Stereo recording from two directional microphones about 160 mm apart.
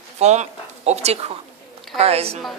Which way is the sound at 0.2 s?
45° right (ahead or behind).